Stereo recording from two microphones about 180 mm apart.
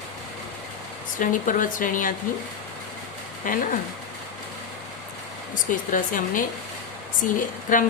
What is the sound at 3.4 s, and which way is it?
Speech, 50° left (ahead or behind).